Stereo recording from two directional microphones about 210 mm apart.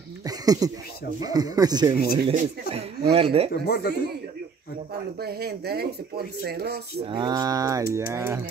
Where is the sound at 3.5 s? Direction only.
45° left (ahead or behind).